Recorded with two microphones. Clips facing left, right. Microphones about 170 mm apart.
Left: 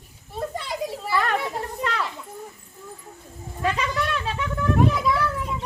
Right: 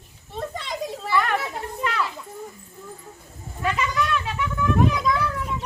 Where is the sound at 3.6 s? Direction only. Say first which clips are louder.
Even; 30° left (ahead or behind).